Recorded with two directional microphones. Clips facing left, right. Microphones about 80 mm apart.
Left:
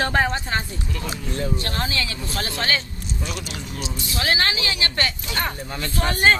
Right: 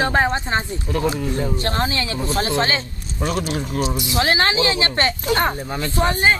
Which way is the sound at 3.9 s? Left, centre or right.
Right.